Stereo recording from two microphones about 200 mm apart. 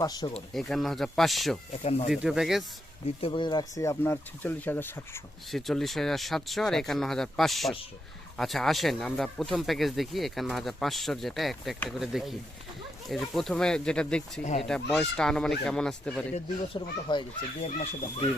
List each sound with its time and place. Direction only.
0.0 s speech: 20° left (ahead or behind)
0.5 s speech: centre (ahead or behind)
1.8 s speech: 30° left (ahead or behind)
2.0 s speech: 5° right (ahead or behind)
3.2 s speech: 25° left (ahead or behind)
5.5 s speech: centre (ahead or behind)
16.3 s speech: 25° left (ahead or behind)